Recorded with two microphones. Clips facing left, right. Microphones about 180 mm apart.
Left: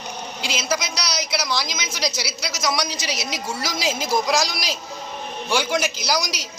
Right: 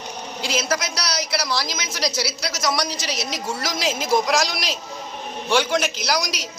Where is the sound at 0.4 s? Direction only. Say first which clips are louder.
Right 2 dB; centre (ahead or behind).